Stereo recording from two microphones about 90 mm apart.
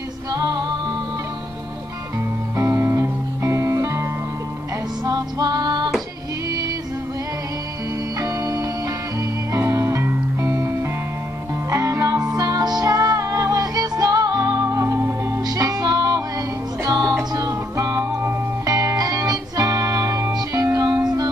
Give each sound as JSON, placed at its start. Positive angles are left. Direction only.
{"t": 0.3, "sound": "music", "side_deg": -45}
{"t": 2.5, "sound": "music", "side_deg": -35}
{"t": 5.0, "sound": "music", "side_deg": -45}
{"t": 8.2, "sound": "music", "side_deg": -40}
{"t": 15.4, "sound": "music", "side_deg": -45}